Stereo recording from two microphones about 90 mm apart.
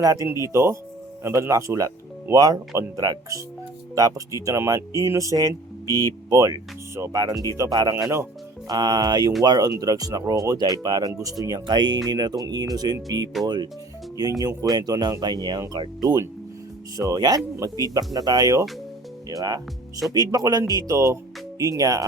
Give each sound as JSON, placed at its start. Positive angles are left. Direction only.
{"t": 0.0, "sound": "speech", "side_deg": -45}
{"t": 0.3, "sound": "speech", "side_deg": -35}
{"t": 8.7, "sound": "speech", "side_deg": -45}
{"t": 11.6, "sound": "speech", "side_deg": -55}